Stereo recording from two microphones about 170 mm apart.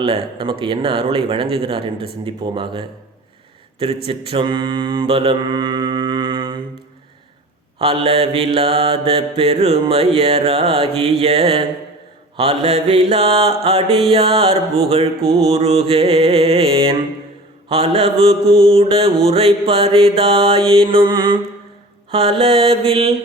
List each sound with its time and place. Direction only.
0.0 s mantra: 30° right (ahead or behind)
7.8 s mantra: 35° right (ahead or behind)